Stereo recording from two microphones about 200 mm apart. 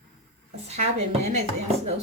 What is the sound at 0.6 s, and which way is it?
Speech, 35° right (ahead or behind).